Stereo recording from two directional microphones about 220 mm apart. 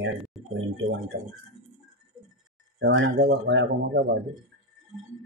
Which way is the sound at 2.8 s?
60° right (ahead or behind).